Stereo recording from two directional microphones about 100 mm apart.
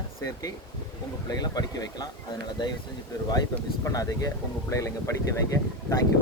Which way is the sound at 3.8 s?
35° left (ahead or behind).